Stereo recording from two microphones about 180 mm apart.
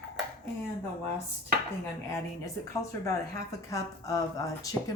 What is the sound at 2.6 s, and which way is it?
Speech, 65° right (ahead or behind).